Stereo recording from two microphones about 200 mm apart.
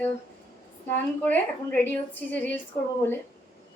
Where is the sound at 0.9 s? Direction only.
10° left (ahead or behind).